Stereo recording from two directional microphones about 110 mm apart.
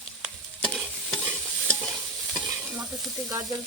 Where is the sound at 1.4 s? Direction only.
10° left (ahead or behind).